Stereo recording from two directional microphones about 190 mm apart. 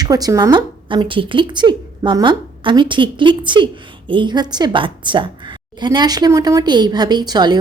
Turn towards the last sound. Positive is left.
turn(degrees=-20)  # may be behind; listen again after turning